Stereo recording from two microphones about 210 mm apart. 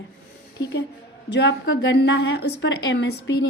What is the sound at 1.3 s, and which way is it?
A woman's voice, 55° left (ahead or behind).